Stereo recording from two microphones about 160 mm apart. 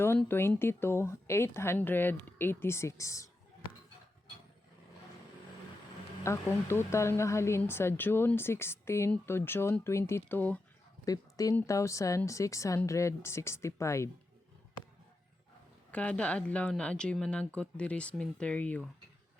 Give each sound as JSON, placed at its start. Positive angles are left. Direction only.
{"t": 0.2, "sound": "speech", "side_deg": 15}
{"t": 6.2, "sound": "speech", "side_deg": 15}
{"t": 11.0, "sound": "speech", "side_deg": 20}
{"t": 15.9, "sound": "speech", "side_deg": 10}